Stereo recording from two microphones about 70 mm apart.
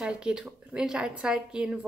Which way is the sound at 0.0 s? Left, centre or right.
Centre.